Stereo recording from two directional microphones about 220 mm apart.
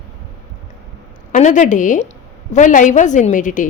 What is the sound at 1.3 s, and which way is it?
A woman's voice, 35° left (ahead or behind).